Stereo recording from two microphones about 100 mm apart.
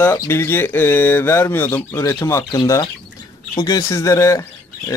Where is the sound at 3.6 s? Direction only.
40° left (ahead or behind).